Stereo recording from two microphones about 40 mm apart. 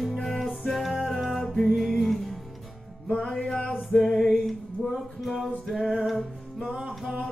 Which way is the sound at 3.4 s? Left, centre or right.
Centre.